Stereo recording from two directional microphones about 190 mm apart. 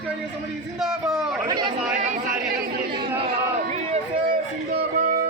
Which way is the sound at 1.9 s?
50° right (ahead or behind).